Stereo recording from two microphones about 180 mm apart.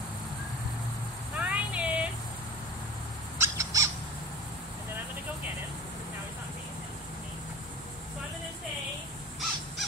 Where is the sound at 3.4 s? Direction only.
15° right (ahead or behind).